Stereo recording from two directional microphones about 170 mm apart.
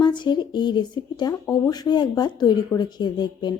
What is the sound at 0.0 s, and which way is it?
Speech, 25° left (ahead or behind).